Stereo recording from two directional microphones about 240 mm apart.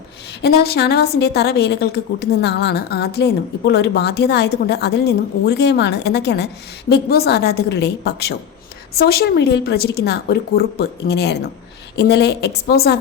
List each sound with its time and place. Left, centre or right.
0.4 s a woman's voice: left